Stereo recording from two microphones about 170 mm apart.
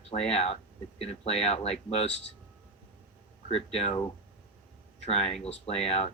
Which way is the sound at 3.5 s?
35° left (ahead or behind).